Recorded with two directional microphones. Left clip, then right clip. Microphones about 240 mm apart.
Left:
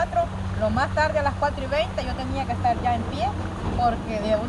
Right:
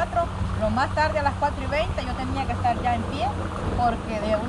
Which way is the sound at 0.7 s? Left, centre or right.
Centre.